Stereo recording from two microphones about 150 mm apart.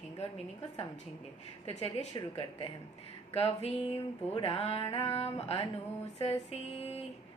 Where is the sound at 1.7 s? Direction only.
45° left (ahead or behind).